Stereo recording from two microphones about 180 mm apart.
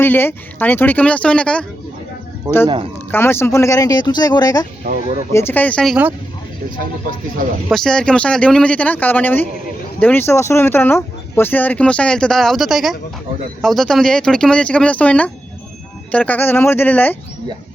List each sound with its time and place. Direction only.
0.0 s speech: 10° left (ahead or behind)
2.5 s speech: 20° right (ahead or behind)
3.1 s speech: 15° left (ahead or behind); by 6.1 s 5° right (ahead or behind)
7.7 s speech: 5° left (ahead or behind)